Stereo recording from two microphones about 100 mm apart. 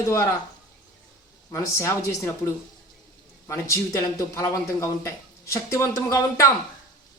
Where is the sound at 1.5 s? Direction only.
25° left (ahead or behind).